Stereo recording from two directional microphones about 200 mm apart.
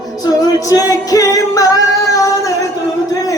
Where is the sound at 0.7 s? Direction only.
15° left (ahead or behind).